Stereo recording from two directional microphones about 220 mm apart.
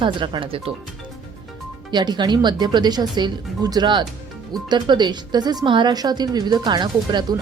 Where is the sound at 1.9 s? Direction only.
20° right (ahead or behind).